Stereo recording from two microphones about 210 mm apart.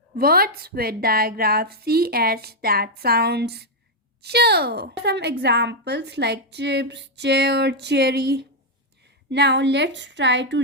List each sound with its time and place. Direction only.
0.2 s a woman's voice: 45° right (ahead or behind)